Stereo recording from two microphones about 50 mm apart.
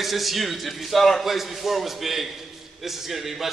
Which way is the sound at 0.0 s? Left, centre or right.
Centre.